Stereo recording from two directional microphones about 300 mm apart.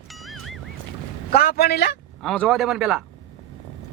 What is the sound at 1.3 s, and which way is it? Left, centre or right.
Speech, left.